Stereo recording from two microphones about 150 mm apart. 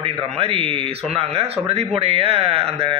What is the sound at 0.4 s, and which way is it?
A man's voice, 40° right (ahead or behind).